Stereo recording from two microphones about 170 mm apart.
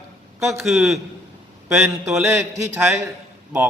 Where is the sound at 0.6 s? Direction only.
Centre (ahead or behind).